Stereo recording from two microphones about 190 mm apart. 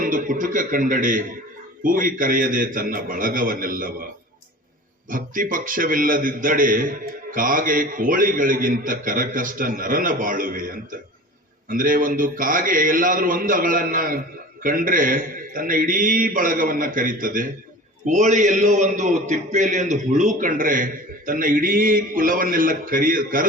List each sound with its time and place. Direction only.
0.0 s a man's voice: 45° right (ahead or behind)
5.0 s a man's voice: 45° right (ahead or behind)